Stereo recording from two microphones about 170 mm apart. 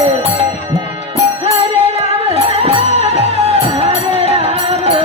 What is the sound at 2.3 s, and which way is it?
Music, 35° right (ahead or behind).